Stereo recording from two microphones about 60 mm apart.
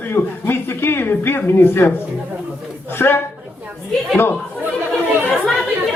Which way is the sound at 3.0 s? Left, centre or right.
Left.